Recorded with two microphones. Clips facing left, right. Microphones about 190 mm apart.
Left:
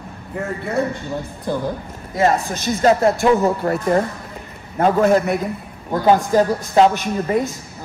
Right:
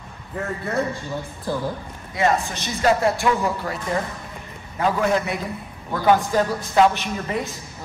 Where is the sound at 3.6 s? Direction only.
55° left (ahead or behind).